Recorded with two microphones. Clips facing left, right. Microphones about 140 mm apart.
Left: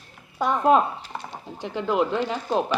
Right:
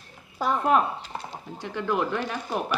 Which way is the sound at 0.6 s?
20° left (ahead or behind).